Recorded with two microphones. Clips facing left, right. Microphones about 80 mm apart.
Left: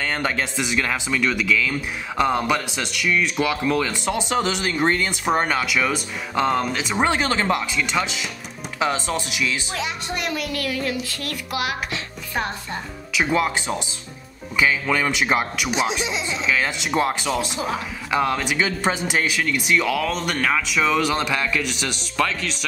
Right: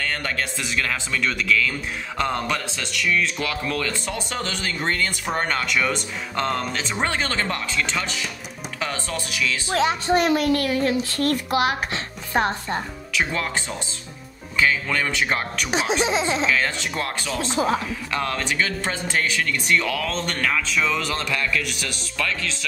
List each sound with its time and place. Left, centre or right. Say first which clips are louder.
0.0 s speech: left 3 dB; centre
9.7 s a woman's voice: right 8 dB; right
13.1 s speech: left 4 dB; centre
15.7 s a woman's voice: right 4 dB; right
16.4 s speech: even; centre